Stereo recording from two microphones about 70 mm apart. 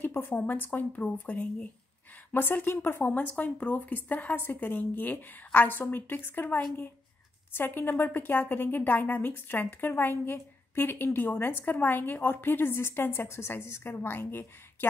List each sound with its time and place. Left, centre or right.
0.1 s a woman's voice: left
2.3 s a woman's voice: left